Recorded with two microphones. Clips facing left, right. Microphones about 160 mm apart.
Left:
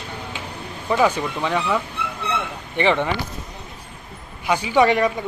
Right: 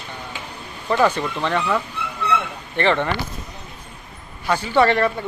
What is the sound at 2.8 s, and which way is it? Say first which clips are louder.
Speech: even; 15° left (ahead or behind).